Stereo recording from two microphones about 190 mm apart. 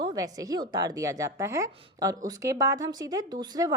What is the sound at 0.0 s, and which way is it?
A woman's voice, 20° right (ahead or behind).